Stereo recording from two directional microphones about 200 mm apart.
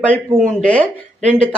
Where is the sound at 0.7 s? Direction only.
5° left (ahead or behind).